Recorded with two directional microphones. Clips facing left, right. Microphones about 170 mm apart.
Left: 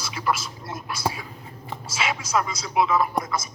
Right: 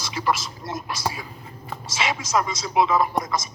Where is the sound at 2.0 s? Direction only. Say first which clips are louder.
Right 1 dB; 30° right (ahead or behind).